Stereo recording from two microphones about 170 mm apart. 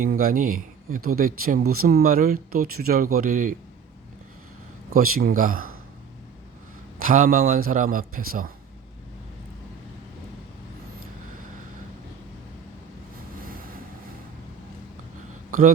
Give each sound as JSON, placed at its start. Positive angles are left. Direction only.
{"t": 0.0, "sound": "speech", "side_deg": -55}
{"t": 4.9, "sound": "speech", "side_deg": -60}
{"t": 7.0, "sound": "speech", "side_deg": -50}